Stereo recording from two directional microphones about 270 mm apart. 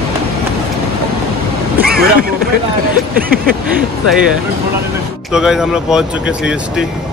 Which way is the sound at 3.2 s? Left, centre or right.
Right.